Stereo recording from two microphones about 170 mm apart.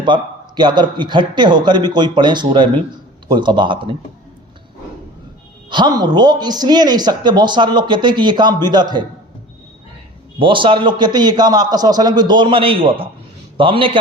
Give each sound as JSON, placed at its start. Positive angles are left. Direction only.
{"t": 0.0, "sound": "speech", "side_deg": -25}
{"t": 5.7, "sound": "speech", "side_deg": -25}
{"t": 10.3, "sound": "speech", "side_deg": -30}